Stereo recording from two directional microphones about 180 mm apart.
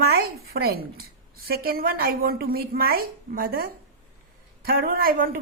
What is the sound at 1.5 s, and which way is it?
A woman's voice, 60° right (ahead or behind).